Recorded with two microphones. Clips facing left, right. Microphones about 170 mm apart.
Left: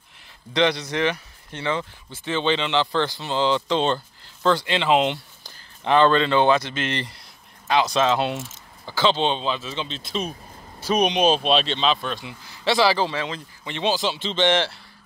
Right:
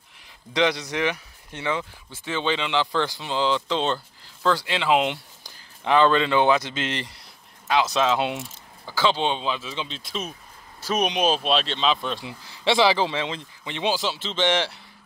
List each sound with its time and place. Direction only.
0.5 s speech: 10° right (ahead or behind)
12.0 s speech: 25° right (ahead or behind); by 14.8 s 10° right (ahead or behind)